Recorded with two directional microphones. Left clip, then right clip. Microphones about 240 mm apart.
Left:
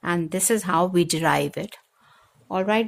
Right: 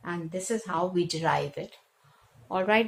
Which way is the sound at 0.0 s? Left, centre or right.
Left.